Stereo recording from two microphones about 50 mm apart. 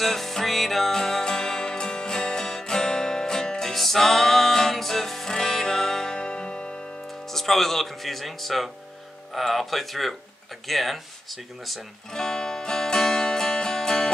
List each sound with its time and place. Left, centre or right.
0.0 s music: centre
7.2 s speech: centre
12.1 s music: centre